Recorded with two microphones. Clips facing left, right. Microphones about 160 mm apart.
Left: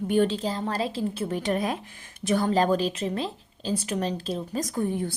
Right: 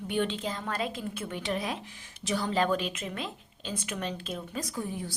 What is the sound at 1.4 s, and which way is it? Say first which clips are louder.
Speech: left 5 dB; 45° left (ahead or behind).